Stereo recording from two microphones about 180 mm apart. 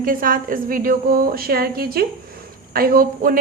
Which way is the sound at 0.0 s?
50° right (ahead or behind).